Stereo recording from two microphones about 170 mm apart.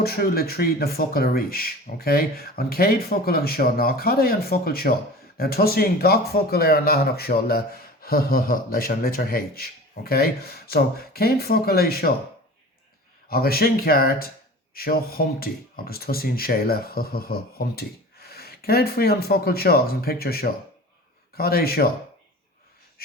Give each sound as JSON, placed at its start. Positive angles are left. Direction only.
{"t": 0.0, "sound": "speech", "side_deg": 65}
{"t": 13.3, "sound": "speech", "side_deg": 65}